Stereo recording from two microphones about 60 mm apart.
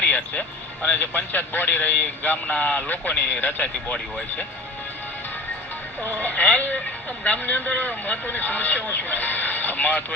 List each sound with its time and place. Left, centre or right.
0.0 s speech: left
6.1 s speech: left